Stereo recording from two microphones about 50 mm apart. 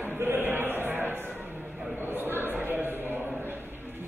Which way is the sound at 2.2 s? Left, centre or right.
Right.